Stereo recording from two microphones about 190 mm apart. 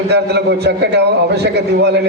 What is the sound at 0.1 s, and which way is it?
A man's voice, 60° right (ahead or behind).